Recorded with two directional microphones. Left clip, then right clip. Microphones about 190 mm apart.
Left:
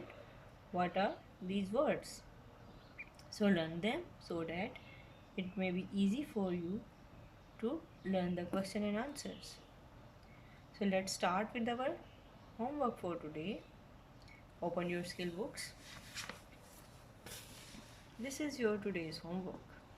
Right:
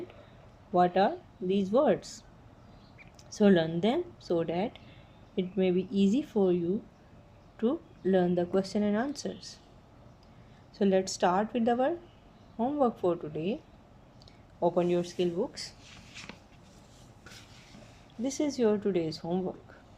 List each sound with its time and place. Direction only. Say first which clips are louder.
0.8 s speech: right 11 dB; 35° right (ahead or behind)
3.3 s speech: right 11 dB; 35° right (ahead or behind)
8.1 s speech: right 12 dB; 40° right (ahead or behind)
10.8 s speech: right 10 dB; 35° right (ahead or behind)
14.6 s speech: right 12 dB; 35° right (ahead or behind)
18.3 s speech: right 10 dB; 30° right (ahead or behind)